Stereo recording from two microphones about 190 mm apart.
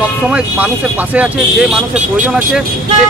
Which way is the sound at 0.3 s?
5° right (ahead or behind).